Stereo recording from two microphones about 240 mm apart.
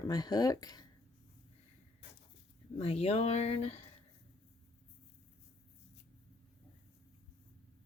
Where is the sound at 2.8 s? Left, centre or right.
Left.